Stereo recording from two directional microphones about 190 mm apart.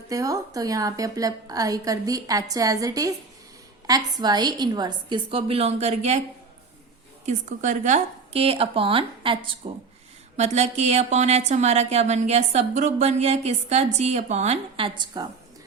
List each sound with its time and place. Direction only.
0.1 s a woman's voice: 20° right (ahead or behind); by 6.1 s 35° right (ahead or behind)
7.3 s speech: 40° right (ahead or behind); by 15.3 s 25° right (ahead or behind)